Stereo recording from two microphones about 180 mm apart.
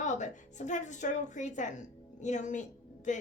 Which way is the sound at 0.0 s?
40° left (ahead or behind).